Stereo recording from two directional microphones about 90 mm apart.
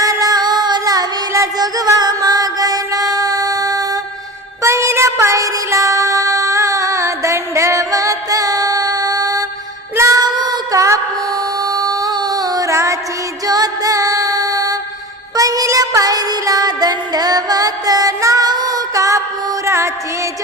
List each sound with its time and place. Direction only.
0.0 s music: 40° right (ahead or behind)
9.9 s child singing: 30° right (ahead or behind)
10.2 s music: 50° right (ahead or behind); by 19.9 s 30° right (ahead or behind)